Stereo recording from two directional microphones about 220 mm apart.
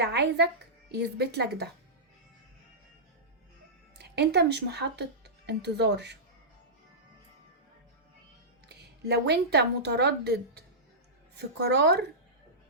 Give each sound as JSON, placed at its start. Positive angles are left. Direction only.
{"t": 0.0, "sound": "speech", "side_deg": -50}
{"t": 3.9, "sound": "speech", "side_deg": -50}
{"t": 8.7, "sound": "a woman's voice", "side_deg": -45}